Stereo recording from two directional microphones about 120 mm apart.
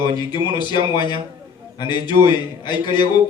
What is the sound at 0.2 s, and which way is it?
A man's voice, 40° left (ahead or behind).